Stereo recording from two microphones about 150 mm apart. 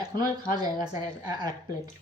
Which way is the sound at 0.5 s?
25° right (ahead or behind).